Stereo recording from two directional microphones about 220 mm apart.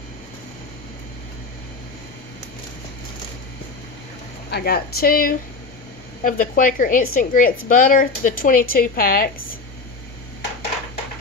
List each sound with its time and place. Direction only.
4.5 s a woman's voice: 45° left (ahead or behind)